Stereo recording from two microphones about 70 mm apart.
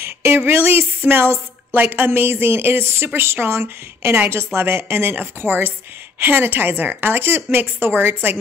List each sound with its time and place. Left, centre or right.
0.0 s a woman's voice: right